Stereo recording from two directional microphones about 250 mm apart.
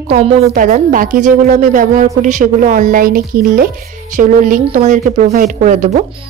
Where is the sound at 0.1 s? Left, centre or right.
Right.